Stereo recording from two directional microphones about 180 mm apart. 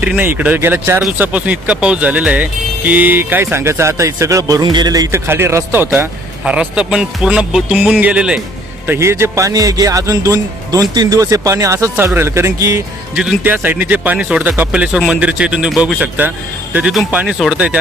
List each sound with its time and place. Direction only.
0.0 s speech: 10° right (ahead or behind)